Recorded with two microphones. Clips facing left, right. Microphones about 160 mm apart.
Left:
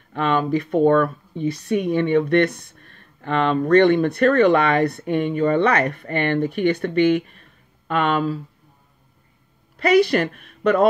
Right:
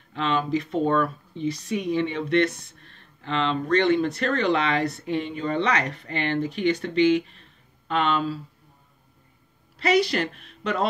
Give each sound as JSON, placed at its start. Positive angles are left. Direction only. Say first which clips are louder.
{"t": 0.1, "sound": "speech", "louder": "left 4 dB", "side_deg": 55}
{"t": 9.8, "sound": "a woman's voice", "louder": "left 6 dB", "side_deg": 55}